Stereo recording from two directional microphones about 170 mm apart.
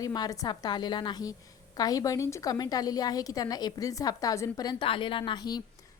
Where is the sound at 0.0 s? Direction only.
20° left (ahead or behind).